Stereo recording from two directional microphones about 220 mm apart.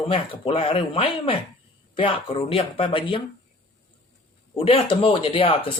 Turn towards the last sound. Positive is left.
turn(degrees=25)  # may be behind; listen again after turning